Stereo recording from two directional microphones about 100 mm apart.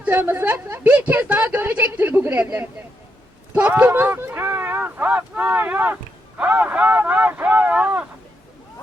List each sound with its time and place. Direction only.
0.0 s a woman's voice: 20° right (ahead or behind)